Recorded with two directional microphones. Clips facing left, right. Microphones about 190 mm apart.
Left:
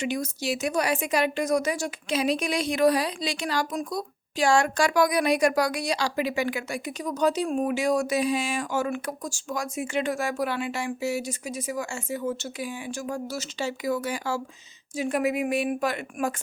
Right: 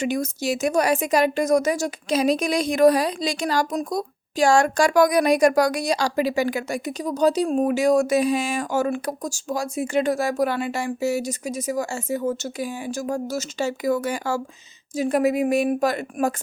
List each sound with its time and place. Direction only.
0.0 s a woman's voice: 45° right (ahead or behind)